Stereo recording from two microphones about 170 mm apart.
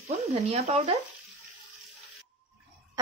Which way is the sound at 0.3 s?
35° right (ahead or behind).